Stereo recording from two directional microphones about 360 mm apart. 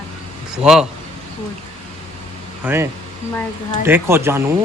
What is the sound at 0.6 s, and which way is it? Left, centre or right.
Speech, centre.